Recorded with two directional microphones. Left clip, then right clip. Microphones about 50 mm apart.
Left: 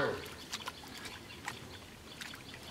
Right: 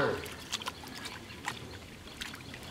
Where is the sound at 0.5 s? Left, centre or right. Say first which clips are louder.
Right 5 dB; centre.